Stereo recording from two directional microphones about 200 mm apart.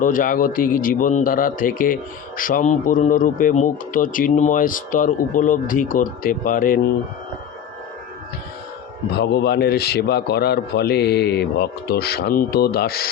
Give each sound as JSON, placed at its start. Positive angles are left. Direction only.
{"t": 0.0, "sound": "a man's voice", "side_deg": 40}
{"t": 9.1, "sound": "a man's voice", "side_deg": 55}